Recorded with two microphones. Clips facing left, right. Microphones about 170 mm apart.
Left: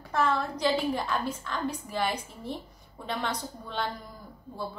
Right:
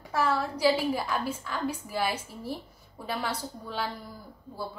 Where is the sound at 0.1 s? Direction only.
10° right (ahead or behind).